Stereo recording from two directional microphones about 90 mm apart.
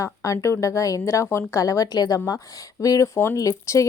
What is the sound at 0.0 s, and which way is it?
Speech, 35° left (ahead or behind).